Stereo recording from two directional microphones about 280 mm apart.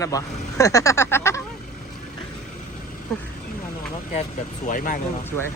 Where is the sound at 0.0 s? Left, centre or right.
Centre.